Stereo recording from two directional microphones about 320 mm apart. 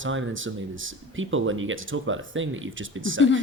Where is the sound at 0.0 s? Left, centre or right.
Right.